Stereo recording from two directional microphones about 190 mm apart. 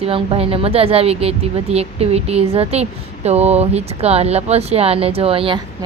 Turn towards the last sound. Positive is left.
turn(degrees=-30)  # may be behind; listen again after turning